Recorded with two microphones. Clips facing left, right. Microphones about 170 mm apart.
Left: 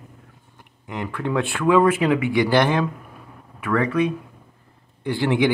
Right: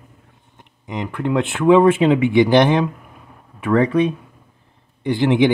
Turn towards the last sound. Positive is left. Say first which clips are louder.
# right 5 dB
turn(degrees=-20)  # may be behind; listen again after turning